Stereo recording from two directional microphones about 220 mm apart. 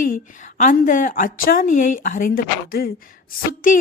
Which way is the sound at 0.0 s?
35° left (ahead or behind).